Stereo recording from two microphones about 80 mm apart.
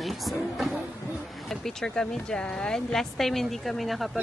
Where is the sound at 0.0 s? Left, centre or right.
Centre.